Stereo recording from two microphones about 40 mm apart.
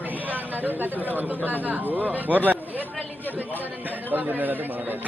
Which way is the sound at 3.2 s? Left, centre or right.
Left.